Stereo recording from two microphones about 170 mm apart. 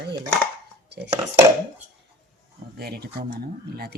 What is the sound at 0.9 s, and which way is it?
Dishes, 80° right.